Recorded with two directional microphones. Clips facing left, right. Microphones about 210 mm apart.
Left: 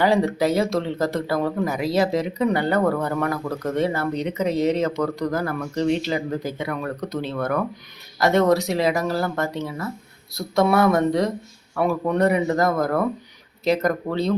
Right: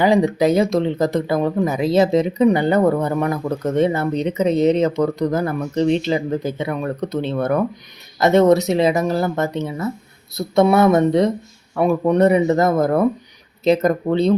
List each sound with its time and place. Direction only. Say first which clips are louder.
0.0 s speech: right 4 dB; 15° right (ahead or behind)